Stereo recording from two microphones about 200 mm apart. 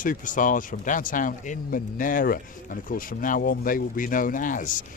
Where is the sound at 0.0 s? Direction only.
40° left (ahead or behind).